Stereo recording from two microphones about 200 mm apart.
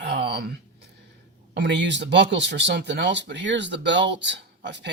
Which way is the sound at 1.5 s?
60° right (ahead or behind).